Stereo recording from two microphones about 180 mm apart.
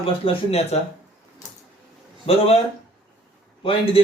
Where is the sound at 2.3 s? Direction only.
35° left (ahead or behind).